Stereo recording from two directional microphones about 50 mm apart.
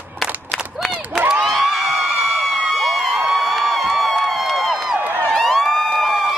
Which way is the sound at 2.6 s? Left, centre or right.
Centre.